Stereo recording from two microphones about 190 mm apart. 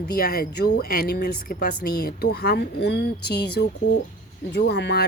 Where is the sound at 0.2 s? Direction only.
55° left (ahead or behind).